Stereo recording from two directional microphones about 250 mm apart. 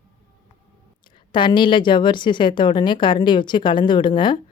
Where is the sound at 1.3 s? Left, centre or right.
Centre.